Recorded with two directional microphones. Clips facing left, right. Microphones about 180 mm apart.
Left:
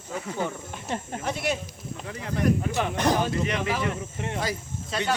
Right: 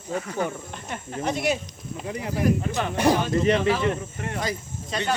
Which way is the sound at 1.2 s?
Centre (ahead or behind).